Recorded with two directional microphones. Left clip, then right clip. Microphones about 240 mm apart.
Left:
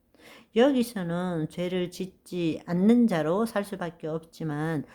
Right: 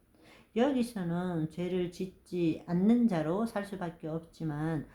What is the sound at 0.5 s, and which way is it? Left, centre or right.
Speech, left.